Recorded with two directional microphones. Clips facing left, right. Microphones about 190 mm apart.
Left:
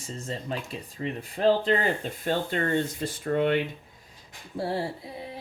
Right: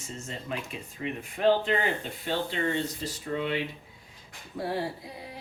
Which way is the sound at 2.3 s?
50° left (ahead or behind).